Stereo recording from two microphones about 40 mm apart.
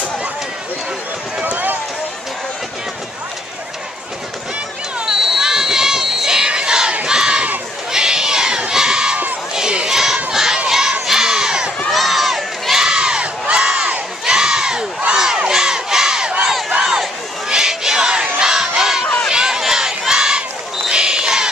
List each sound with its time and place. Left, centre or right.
1.4 s run: right
5.0 s crowd: centre
7.9 s a sound: centre
9.5 s crowd: centre
11.9 s crowd: centre
12.7 s crowd: centre
16.8 s a sound: centre
17.5 s crowd: centre
18.4 s battle cry: centre
18.8 s a sound: centre
19.3 s crowd: centre
20.9 s crow: right